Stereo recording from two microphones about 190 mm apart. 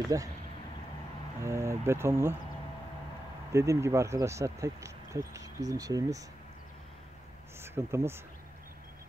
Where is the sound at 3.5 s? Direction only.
15° right (ahead or behind).